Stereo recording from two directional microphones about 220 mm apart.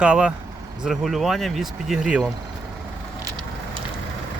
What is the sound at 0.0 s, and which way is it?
Speech, 5° right (ahead or behind).